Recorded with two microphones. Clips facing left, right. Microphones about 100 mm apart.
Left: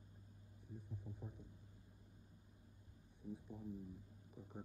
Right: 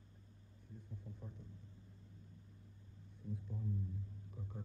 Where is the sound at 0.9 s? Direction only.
15° left (ahead or behind).